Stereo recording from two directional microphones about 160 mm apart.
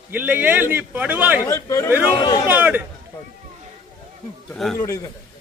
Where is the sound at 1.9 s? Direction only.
10° right (ahead or behind).